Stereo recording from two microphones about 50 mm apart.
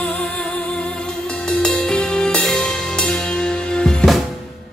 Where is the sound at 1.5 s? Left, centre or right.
Centre.